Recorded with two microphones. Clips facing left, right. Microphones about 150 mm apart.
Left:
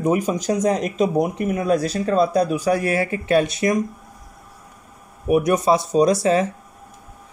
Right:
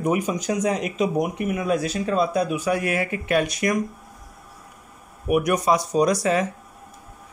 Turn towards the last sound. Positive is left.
turn(degrees=30)  # may be behind; listen again after turning